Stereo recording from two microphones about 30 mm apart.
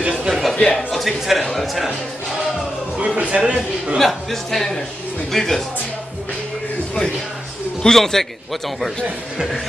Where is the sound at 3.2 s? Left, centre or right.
Right.